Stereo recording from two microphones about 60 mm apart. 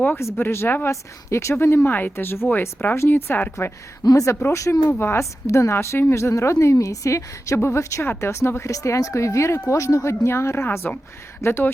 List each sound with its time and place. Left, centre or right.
0.3 s speech: left
0.9 s speech: left
2.9 s speech: left
4.0 s speech: left
4.9 s a woman's voice: left
8.7 s a woman's voice: left